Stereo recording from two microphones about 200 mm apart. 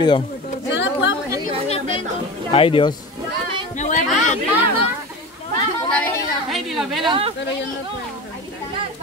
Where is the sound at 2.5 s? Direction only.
25° left (ahead or behind).